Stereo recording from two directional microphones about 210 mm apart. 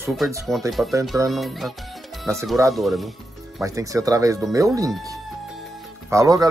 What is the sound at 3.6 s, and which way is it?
Speech, 15° right (ahead or behind).